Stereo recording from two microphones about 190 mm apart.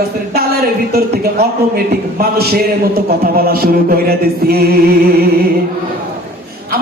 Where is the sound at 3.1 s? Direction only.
55° right (ahead or behind).